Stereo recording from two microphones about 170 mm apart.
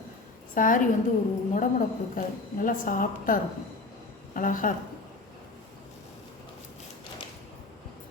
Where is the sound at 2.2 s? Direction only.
55° left (ahead or behind).